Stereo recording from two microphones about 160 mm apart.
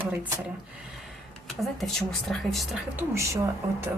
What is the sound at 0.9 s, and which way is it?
Speech, centre (ahead or behind).